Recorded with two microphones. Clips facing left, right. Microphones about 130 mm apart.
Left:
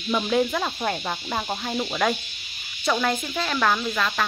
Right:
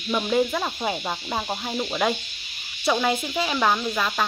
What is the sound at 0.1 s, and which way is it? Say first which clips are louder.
Speech: even; 5° right (ahead or behind).